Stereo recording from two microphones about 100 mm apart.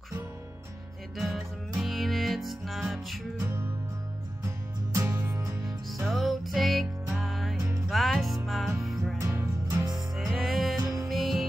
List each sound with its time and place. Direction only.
1.1 s music: centre (ahead or behind)
3.3 s music: 30° right (ahead or behind)
5.9 s music: centre (ahead or behind)
9.2 s music: 30° right (ahead or behind)
10.3 s music: centre (ahead or behind)
10.8 s music: 35° right (ahead or behind)
11.1 s music: centre (ahead or behind)